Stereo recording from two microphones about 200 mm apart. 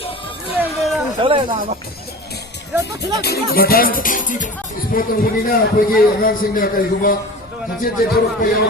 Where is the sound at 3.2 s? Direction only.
50° left (ahead or behind).